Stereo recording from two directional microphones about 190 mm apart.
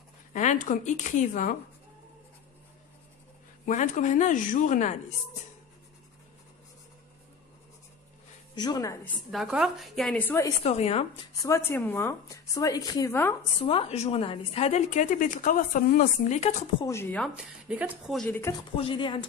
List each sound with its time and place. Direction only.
0.3 s a woman's voice: 40° left (ahead or behind)
3.6 s a woman's voice: 40° left (ahead or behind)
8.5 s a woman's voice: 20° left (ahead or behind)
9.0 s a woman's voice: centre (ahead or behind)
10.6 s a woman's voice: 35° left (ahead or behind)
11.4 s a woman's voice: 15° left (ahead or behind)
13.6 s a woman's voice: 30° left (ahead or behind)
16.8 s a woman's voice: 15° left (ahead or behind)
17.4 s a woman's voice: 5° right (ahead or behind)
18.8 s a woman's voice: 25° left (ahead or behind)